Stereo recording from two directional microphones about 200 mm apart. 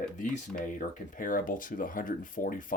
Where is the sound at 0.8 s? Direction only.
40° left (ahead or behind).